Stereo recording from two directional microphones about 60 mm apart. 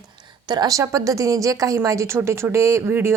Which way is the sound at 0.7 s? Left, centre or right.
Right.